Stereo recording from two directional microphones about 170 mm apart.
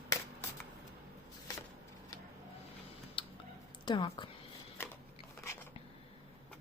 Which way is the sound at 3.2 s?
30° left (ahead or behind).